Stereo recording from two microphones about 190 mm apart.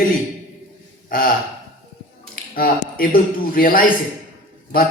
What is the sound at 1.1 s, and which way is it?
Speech, 50° left (ahead or behind).